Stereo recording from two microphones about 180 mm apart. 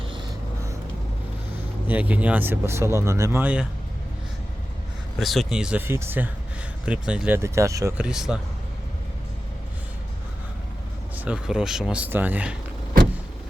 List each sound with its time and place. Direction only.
0.0 s a sound: 30° right (ahead or behind)
1.9 s speech: 10° right (ahead or behind)
5.2 s speech: centre (ahead or behind); by 8.0 s 15° right (ahead or behind)
8.0 s speech: 5° right (ahead or behind)
11.3 s speech: 5° right (ahead or behind)